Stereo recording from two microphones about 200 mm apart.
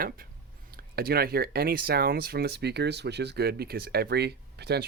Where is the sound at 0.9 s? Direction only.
50° right (ahead or behind).